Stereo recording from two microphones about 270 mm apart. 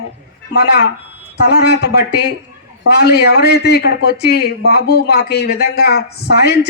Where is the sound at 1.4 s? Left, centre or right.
Left.